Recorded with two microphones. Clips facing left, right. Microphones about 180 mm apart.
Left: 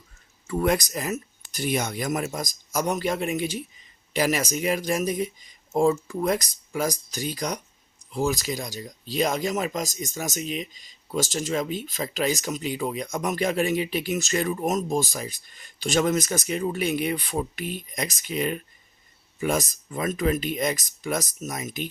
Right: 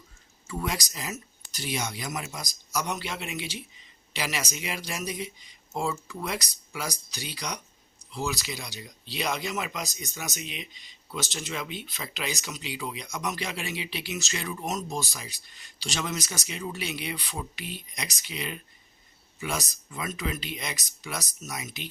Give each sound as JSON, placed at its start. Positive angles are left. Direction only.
{"t": 0.4, "sound": "speech", "side_deg": 55}